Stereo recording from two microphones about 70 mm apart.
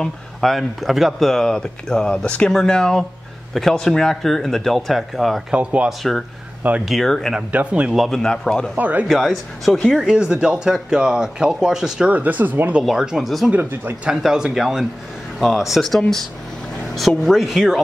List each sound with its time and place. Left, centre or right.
0.0 s speech: centre
5.5 s speech: centre
5.9 s speech: centre
7.5 s speech: centre
7.9 s speech: centre
8.7 s speech: right
9.0 s speech: centre
12.1 s speech: right
12.8 s speech: centre
13.6 s speech: right
14.0 s speech: centre